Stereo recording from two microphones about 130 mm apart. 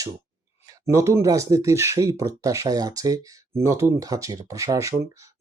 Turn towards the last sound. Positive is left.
turn(degrees=-25)  # may be behind; listen again after turning